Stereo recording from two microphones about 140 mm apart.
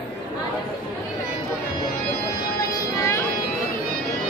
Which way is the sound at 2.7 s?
20° left (ahead or behind).